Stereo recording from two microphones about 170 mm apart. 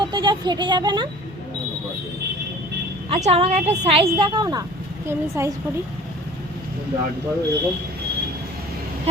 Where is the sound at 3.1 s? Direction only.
40° right (ahead or behind); by 5.5 s 15° right (ahead or behind).